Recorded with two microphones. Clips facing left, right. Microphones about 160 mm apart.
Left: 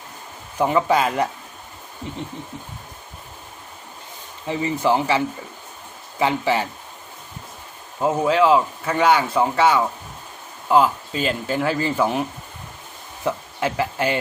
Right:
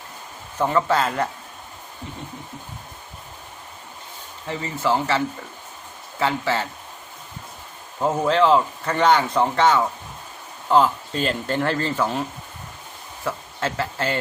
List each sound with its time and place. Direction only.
0.6 s speech: 15° left (ahead or behind)
4.4 s speech: 15° left (ahead or behind)
8.0 s speech: 10° left (ahead or behind)
13.2 s speech: 15° left (ahead or behind)